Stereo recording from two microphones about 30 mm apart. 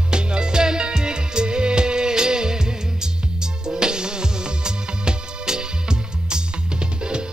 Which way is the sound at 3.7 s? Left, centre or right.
Right.